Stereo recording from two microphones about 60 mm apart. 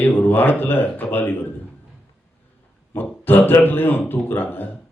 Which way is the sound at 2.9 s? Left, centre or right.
Left.